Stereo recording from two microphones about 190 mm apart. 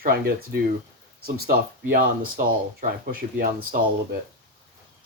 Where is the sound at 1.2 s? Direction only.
50° right (ahead or behind).